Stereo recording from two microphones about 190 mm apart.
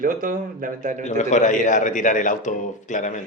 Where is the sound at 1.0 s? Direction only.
40° left (ahead or behind).